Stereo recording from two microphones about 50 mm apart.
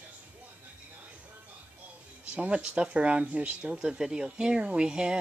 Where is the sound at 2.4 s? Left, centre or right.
Right.